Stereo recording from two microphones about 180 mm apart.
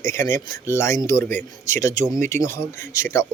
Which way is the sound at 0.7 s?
15° left (ahead or behind).